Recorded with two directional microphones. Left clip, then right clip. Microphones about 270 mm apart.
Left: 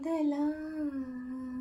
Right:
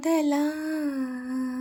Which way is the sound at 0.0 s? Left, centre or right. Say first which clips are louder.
Right 7 dB; right.